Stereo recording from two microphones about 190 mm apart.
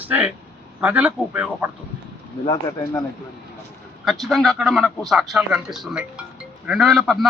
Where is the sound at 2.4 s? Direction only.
20° left (ahead or behind).